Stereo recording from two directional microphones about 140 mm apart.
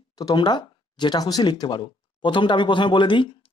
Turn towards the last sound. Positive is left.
turn(degrees=35)  # may be behind; listen again after turning